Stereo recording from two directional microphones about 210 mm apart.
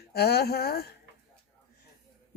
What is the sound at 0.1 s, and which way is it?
Speech, 50° left (ahead or behind).